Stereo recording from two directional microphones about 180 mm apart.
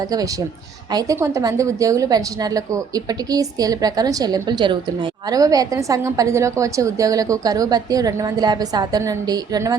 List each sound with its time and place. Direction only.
0.9 s a woman's voice: 20° right (ahead or behind)